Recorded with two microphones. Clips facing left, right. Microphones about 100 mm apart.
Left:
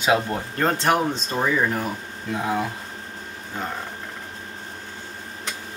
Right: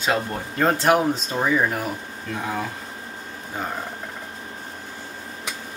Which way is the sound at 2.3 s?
15° left (ahead or behind).